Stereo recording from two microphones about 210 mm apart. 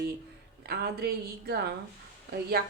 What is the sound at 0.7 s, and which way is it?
Speech, 50° right (ahead or behind).